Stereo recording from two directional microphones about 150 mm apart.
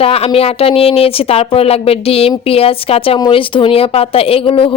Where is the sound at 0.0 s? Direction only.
40° left (ahead or behind).